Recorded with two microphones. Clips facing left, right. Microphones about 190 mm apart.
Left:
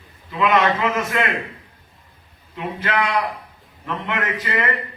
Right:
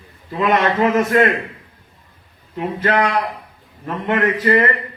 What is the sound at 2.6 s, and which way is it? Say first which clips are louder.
A man's voice: right 5 dB; 40° right (ahead or behind).